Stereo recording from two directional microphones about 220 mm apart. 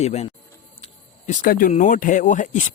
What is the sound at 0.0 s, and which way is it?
Speech, 30° left (ahead or behind).